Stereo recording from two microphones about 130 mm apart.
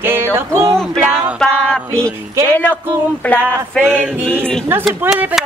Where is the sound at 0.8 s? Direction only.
5° left (ahead or behind).